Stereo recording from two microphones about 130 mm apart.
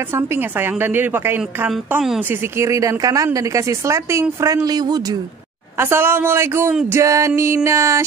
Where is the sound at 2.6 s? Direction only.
25° right (ahead or behind).